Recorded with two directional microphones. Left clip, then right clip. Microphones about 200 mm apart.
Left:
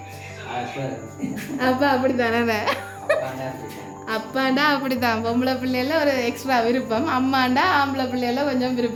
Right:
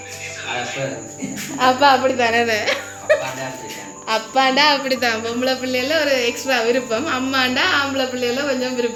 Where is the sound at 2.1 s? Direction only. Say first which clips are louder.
Right 4 dB; 45° left (ahead or behind).